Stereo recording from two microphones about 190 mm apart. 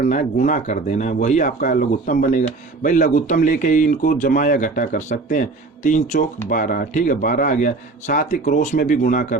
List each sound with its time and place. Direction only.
0.0 s speech: 40° left (ahead or behind)